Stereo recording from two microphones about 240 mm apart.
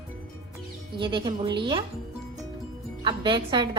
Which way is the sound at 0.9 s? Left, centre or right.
Centre.